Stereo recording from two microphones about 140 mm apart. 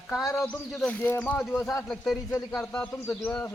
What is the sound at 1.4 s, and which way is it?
Speech, centre (ahead or behind).